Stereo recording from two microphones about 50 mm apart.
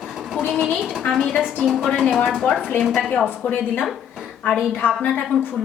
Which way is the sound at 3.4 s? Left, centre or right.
Left.